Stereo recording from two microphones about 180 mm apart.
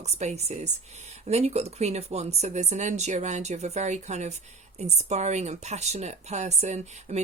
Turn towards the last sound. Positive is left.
turn(degrees=-40)  # may be behind; listen again after turning